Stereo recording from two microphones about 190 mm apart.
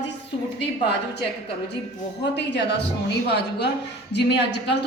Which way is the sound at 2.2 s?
65° left (ahead or behind).